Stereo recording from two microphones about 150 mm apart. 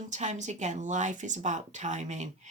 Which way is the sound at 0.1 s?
55° right (ahead or behind).